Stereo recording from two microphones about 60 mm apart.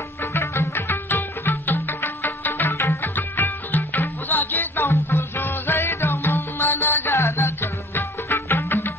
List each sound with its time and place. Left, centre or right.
0.2 s music: left
2.7 s music: left
3.0 s music: left
4.8 s music: left
6.6 s music: left
7.1 s music: left